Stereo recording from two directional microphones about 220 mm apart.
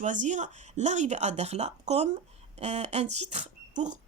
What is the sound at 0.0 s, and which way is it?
Speech, 35° right (ahead or behind).